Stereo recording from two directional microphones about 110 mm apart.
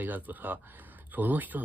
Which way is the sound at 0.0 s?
15° right (ahead or behind).